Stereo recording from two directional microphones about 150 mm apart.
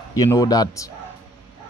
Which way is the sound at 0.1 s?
20° left (ahead or behind).